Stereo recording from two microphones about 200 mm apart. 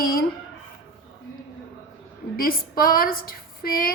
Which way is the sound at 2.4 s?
45° left (ahead or behind).